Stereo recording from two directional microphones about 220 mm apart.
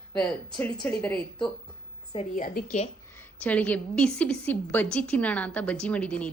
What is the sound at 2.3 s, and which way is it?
Speech, 40° left (ahead or behind).